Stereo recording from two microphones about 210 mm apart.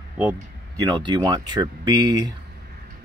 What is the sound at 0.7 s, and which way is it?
Speech, 20° right (ahead or behind).